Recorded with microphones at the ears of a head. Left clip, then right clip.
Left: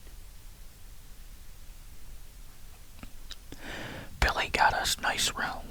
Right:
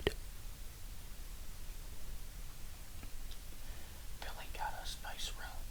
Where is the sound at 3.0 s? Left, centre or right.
Left.